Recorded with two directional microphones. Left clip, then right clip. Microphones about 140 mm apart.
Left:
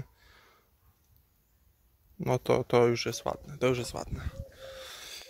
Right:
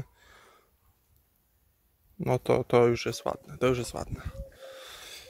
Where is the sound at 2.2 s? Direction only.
20° right (ahead or behind).